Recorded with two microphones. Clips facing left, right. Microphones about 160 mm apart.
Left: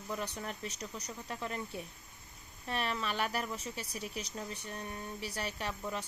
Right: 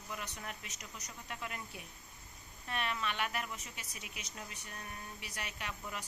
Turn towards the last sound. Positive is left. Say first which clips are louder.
# left 6 dB
turn(degrees=30)  # may be behind; listen again after turning